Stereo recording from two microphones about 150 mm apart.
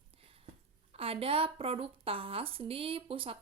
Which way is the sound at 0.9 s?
40° right (ahead or behind).